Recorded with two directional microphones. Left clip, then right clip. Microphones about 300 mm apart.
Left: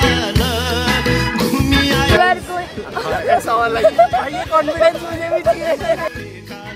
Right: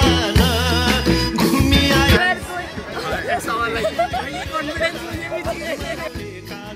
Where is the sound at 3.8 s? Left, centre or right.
Left.